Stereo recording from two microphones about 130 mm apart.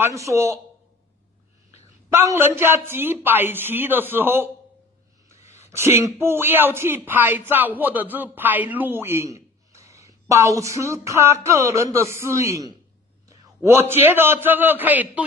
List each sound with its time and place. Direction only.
0.0 s speech: 25° right (ahead or behind)
2.0 s speech: 20° right (ahead or behind)
5.7 s speech: 20° right (ahead or behind)
9.7 s a sound: 25° right (ahead or behind)
10.0 s speech: 25° right (ahead or behind)